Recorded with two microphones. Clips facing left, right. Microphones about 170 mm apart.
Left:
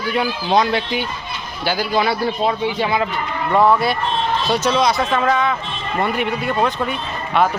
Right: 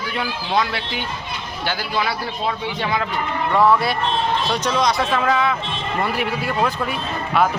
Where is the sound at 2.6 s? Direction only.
10° left (ahead or behind).